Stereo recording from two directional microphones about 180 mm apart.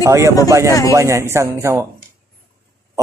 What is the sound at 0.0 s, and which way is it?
Speech, 15° right (ahead or behind).